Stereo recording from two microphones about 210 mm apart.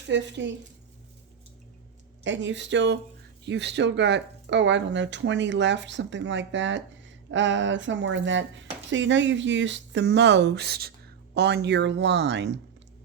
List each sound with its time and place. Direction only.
0.1 s speech: 55° right (ahead or behind)
2.2 s speech: 60° right (ahead or behind)